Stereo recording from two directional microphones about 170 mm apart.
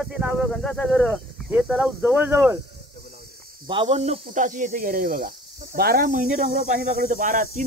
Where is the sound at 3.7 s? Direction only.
30° right (ahead or behind).